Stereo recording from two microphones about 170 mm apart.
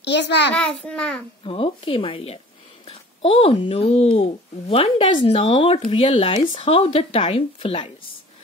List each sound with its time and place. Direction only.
0.0 s a child's voice: 90° left
0.6 s a child's voice: 5° left (ahead or behind)
1.4 s speech: 30° left (ahead or behind)